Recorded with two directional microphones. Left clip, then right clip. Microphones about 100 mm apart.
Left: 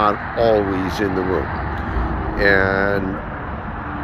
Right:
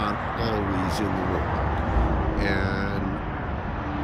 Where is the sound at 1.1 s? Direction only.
30° right (ahead or behind).